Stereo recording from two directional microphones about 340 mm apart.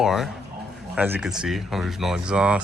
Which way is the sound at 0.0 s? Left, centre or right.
Centre.